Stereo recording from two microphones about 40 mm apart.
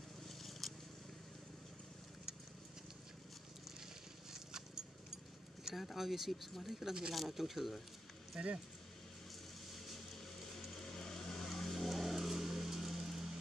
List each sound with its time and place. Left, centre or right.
0.4 s vehicle: centre
4.3 s a sound: centre
5.8 s speech: centre
8.3 s speech: centre
10.7 s vehicle: centre